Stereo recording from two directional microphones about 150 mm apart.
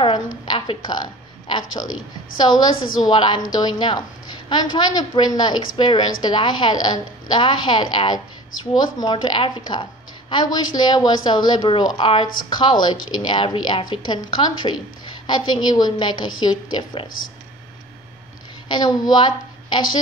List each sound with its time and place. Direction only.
0.0 s a sound: 30° left (ahead or behind)
2.4 s a woman's voice: 30° left (ahead or behind)
18.7 s a woman's voice: 30° left (ahead or behind)